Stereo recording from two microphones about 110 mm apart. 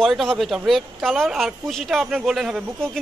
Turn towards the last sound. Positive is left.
turn(degrees=0)  # may be behind; listen again after turning